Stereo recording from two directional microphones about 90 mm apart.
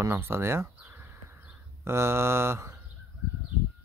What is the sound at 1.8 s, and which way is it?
Speech, 30° right (ahead or behind).